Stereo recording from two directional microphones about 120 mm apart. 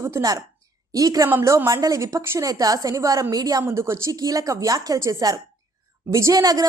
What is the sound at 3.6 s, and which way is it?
A woman's voice, 20° right (ahead or behind).